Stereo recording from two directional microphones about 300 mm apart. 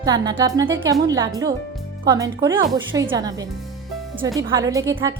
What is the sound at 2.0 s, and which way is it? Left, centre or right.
A woman's voice, centre.